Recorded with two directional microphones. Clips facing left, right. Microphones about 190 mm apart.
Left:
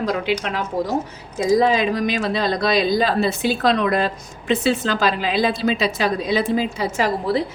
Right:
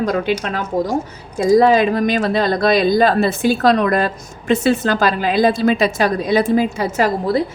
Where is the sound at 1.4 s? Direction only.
50° right (ahead or behind).